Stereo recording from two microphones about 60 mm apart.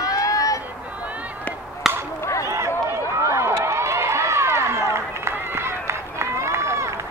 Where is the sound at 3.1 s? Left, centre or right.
Right.